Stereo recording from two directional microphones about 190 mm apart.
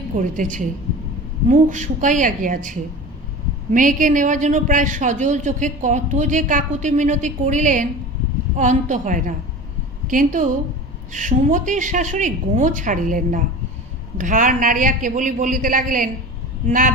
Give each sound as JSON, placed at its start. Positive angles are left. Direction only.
{"t": 0.2, "sound": "a man's voice", "side_deg": -40}